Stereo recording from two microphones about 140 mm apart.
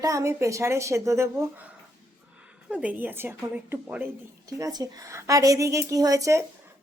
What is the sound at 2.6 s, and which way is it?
A woman's voice, 10° right (ahead or behind).